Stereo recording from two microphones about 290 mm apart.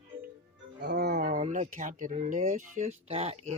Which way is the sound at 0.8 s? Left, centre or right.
Right.